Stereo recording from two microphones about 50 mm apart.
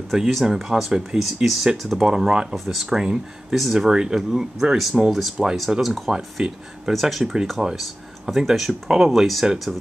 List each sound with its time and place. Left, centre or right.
0.1 s speech: centre
2.0 s speech: centre
2.5 s speech: centre
3.0 s speech: centre
3.5 s speech: centre
6.1 s speech: centre
6.9 s speech: centre